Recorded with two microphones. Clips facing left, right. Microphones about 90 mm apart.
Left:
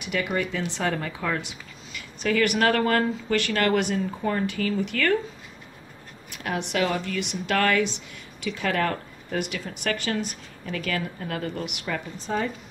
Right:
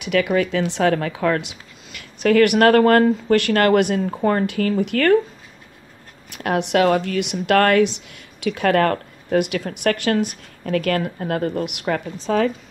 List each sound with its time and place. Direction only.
0.0 s speech: 90° right; by 5.2 s 50° right (ahead or behind)
6.3 s speech: 60° right (ahead or behind)
12.3 s speech: 90° right